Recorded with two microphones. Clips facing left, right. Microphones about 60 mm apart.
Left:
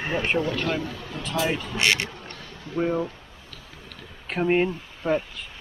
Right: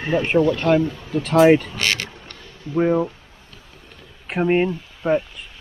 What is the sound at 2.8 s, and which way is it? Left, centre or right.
Speech, centre.